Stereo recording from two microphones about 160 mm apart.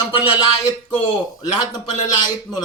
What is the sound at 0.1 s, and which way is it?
Speech, 35° left (ahead or behind).